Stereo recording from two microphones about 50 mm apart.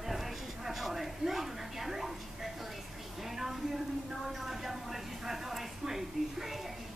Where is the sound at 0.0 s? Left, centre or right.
Centre.